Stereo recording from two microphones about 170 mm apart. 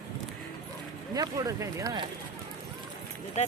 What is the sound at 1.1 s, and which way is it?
Speech, 20° right (ahead or behind).